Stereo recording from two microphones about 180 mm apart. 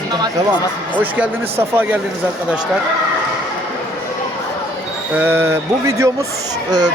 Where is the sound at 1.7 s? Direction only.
10° right (ahead or behind).